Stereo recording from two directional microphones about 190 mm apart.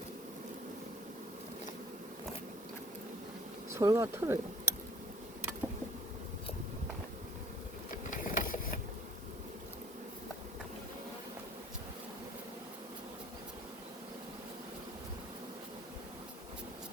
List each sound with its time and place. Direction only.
3.8 s speech: 15° right (ahead or behind)
8.1 s engine: 45° left (ahead or behind)